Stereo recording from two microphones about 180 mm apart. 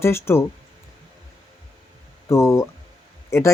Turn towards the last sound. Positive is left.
turn(degrees=15)  # may be behind; listen again after turning